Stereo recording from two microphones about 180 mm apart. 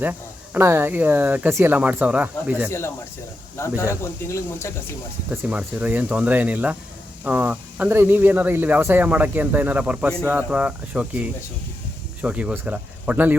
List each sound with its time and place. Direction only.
0.0 s speech: 10° right (ahead or behind)
2.6 s speech: 15° left (ahead or behind)
5.3 s speech: 10° right (ahead or behind)